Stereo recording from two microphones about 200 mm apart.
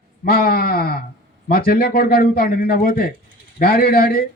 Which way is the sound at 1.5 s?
50° left (ahead or behind).